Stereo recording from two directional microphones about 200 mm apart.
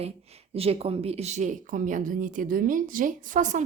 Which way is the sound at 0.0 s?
30° right (ahead or behind).